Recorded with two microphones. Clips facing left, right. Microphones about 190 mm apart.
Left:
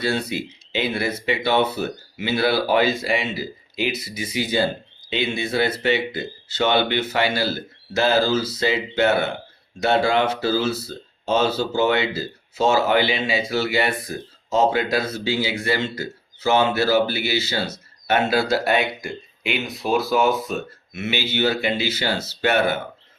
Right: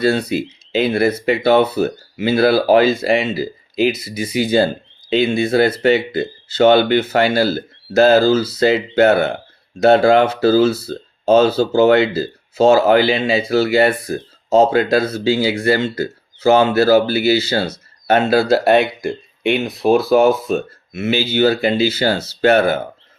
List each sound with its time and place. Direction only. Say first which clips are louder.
0.1 s speech: right 6 dB; 40° right (ahead or behind)
18.1 s speech: right 6 dB; 40° right (ahead or behind)
20.1 s speech: right 7 dB; 55° right (ahead or behind)
20.5 s speech: right 8 dB; 35° right (ahead or behind)